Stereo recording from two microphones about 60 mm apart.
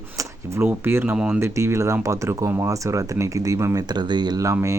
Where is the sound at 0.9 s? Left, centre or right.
Right.